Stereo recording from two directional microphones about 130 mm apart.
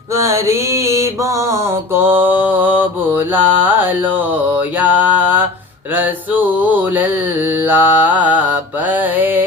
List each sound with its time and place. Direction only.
0.3 s mantra: 20° right (ahead or behind)